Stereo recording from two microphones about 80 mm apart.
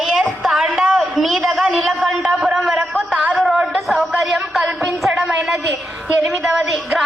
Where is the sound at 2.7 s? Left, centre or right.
Centre.